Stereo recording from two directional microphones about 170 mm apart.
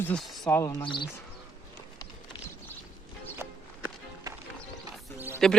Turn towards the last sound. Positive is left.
turn(degrees=5)  # may be behind; listen again after turning